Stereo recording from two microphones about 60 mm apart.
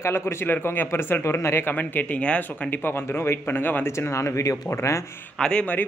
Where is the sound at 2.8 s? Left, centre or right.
Left.